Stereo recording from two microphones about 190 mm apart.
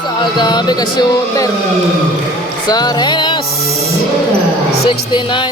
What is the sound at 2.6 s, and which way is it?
Music, 20° left (ahead or behind).